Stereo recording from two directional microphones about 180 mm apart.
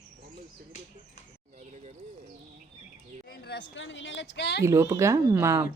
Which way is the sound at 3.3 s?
70° left (ahead or behind).